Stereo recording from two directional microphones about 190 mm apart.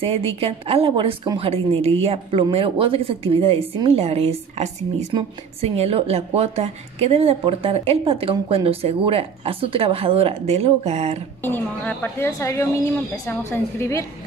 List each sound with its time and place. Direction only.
0.0 s a woman's voice: 30° right (ahead or behind)
11.4 s a woman's voice: 10° left (ahead or behind)